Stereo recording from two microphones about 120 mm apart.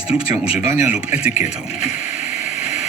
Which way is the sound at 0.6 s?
20° right (ahead or behind).